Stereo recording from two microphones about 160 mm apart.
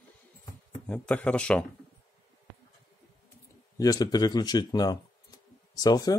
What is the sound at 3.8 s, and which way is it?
A man's voice, 20° left (ahead or behind).